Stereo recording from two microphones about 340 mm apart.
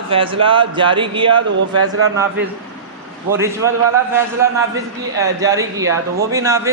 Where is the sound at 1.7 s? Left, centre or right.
Right.